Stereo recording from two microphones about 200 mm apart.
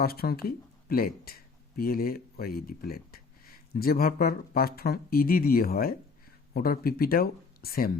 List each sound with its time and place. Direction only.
0.0 s speech: 50° left (ahead or behind)